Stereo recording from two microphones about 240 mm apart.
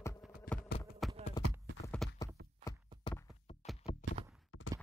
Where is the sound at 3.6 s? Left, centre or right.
Left.